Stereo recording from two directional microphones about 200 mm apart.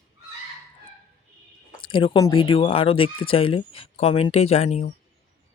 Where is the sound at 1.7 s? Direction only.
25° left (ahead or behind).